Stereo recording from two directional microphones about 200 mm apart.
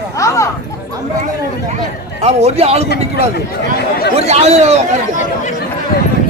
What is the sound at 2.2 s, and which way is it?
Speech, 30° right (ahead or behind).